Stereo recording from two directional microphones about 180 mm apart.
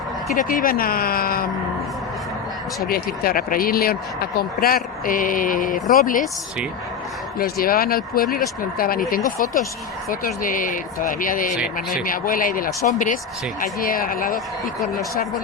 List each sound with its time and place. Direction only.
0.3 s speech: 50° left (ahead or behind)
2.8 s speech: 55° left (ahead or behind)
7.3 s speech: 55° left (ahead or behind)